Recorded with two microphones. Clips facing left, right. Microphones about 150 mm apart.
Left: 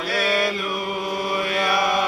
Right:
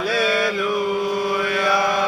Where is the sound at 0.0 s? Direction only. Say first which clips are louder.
Right 3 dB; 90° right.